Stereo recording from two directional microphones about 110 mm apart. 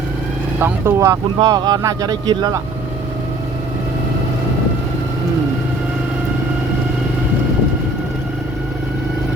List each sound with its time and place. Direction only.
0.6 s speech: 25° right (ahead or behind)
1.4 s speech: 40° right (ahead or behind)